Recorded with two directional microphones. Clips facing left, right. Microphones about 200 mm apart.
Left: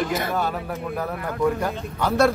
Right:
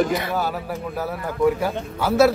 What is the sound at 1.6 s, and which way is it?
Speech, 5° right (ahead or behind).